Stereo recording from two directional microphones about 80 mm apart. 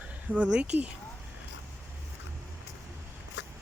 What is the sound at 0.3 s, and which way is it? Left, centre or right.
Speech, centre.